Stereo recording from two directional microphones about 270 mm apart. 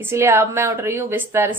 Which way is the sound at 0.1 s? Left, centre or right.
Centre.